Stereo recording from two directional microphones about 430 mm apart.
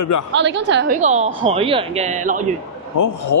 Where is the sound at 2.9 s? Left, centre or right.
Left.